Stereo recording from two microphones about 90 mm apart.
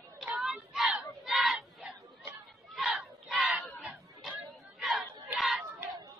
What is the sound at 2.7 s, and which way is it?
Battle cry, centre (ahead or behind).